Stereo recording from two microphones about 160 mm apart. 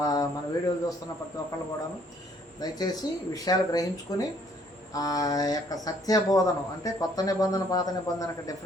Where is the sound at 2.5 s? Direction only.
25° left (ahead or behind).